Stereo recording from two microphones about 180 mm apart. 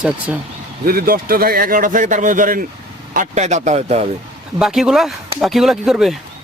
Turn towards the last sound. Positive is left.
turn(degrees=0)  # may be behind; listen again after turning